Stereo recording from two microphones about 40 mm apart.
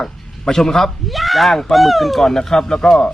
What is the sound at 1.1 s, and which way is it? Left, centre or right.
Speech, centre.